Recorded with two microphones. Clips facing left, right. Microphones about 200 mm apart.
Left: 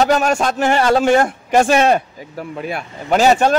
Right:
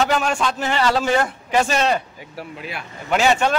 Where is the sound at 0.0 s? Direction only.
40° left (ahead or behind).